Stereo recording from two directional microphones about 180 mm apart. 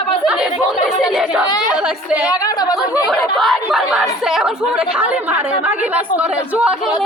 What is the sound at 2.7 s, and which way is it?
Speech, centre (ahead or behind).